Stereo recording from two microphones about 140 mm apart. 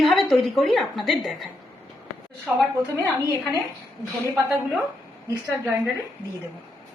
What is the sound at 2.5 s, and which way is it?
Speech, 10° right (ahead or behind).